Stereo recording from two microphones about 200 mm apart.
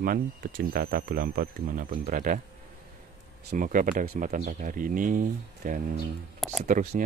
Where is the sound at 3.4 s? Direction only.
40° right (ahead or behind).